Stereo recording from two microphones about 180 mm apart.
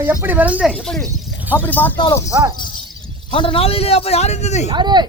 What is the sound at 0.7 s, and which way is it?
Speech, 5° left (ahead or behind).